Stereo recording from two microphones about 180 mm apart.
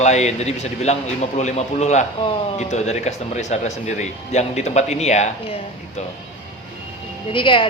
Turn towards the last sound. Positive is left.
turn(degrees=30)  # may be behind; listen again after turning